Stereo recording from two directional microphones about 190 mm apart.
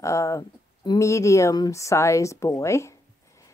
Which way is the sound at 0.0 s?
15° left (ahead or behind).